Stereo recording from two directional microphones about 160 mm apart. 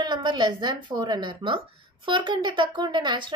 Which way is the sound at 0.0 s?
25° right (ahead or behind).